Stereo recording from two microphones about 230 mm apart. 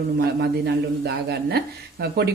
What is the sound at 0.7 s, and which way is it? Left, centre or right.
Speech, right.